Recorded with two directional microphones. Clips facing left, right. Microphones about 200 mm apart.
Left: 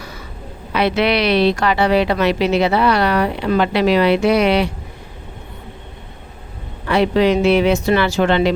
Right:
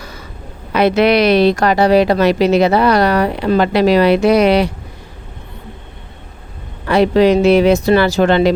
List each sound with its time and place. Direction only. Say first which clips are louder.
0.7 s a woman's voice: right 5 dB; 45° right (ahead or behind)
6.8 s a woman's voice: right 4 dB; 40° right (ahead or behind)